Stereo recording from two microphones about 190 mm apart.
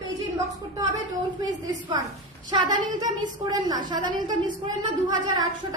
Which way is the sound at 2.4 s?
20° right (ahead or behind).